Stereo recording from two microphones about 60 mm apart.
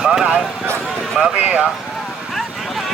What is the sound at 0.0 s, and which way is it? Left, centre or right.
Speech, centre.